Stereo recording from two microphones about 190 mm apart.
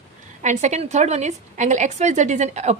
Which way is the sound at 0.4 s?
35° right (ahead or behind).